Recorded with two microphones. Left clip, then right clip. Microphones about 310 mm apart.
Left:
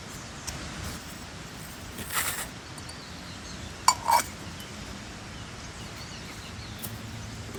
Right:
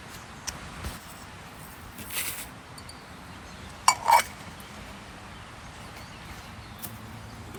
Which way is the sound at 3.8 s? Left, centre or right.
Right.